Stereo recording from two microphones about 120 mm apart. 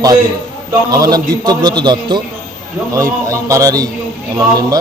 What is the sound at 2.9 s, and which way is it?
Speech, 25° right (ahead or behind).